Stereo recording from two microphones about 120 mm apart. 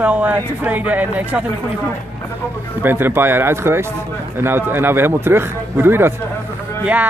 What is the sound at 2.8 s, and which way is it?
A man's voice, 15° right (ahead or behind).